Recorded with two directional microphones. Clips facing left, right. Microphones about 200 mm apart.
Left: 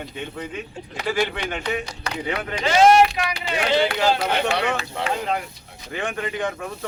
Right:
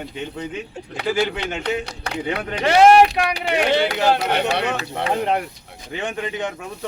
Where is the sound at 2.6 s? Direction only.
60° right (ahead or behind).